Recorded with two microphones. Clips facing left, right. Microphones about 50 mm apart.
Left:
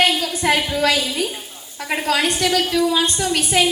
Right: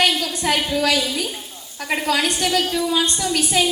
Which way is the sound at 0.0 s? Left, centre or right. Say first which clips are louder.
Left 2 dB; left.